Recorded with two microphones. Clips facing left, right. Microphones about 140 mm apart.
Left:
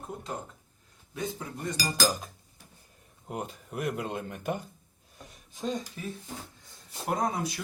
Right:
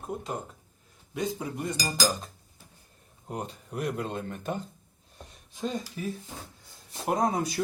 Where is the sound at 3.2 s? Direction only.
5° left (ahead or behind).